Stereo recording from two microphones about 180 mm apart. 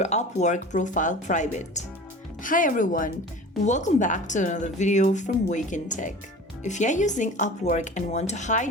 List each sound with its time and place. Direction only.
0.0 s speech: 40° left (ahead or behind)